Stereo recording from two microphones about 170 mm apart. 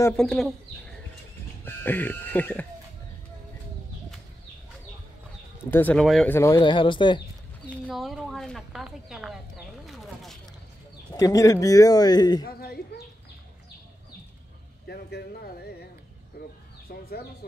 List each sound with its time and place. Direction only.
0.1 s speech: 5° left (ahead or behind)
5.7 s a woman's voice: 10° left (ahead or behind)
6.3 s speech: 15° left (ahead or behind)
6.6 s speech: 30° left (ahead or behind)
7.9 s a woman's voice: centre (ahead or behind)
9.8 s a sound: centre (ahead or behind)
11.1 s speech: 20° left (ahead or behind)
12.4 s bird: 65° left (ahead or behind)
14.9 s a sound: 70° left (ahead or behind)
16.9 s a sound: 70° left (ahead or behind)